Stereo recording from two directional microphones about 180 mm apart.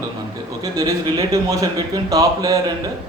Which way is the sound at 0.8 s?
20° right (ahead or behind).